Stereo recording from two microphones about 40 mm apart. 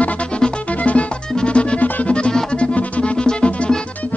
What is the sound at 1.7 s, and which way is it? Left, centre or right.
Music, left.